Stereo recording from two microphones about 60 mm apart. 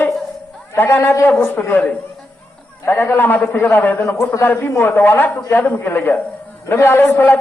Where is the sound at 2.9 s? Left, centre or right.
Left.